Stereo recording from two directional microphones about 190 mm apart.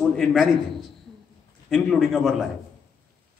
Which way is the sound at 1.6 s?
Centre (ahead or behind).